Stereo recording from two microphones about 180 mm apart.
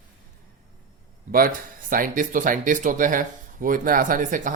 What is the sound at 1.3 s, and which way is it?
Speech, 55° right (ahead or behind).